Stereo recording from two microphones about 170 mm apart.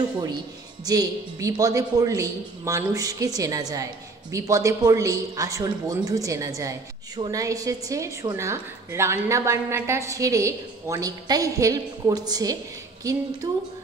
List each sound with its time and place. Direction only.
0.8 s speech: 20° right (ahead or behind)